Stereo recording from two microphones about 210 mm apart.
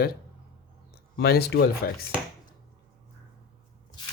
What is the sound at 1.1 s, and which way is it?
Speech, 50° left (ahead or behind).